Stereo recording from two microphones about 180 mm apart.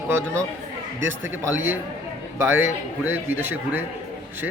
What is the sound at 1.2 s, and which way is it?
A man's voice, 10° right (ahead or behind).